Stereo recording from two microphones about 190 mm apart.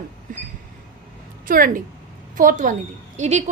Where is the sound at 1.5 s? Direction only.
45° right (ahead or behind).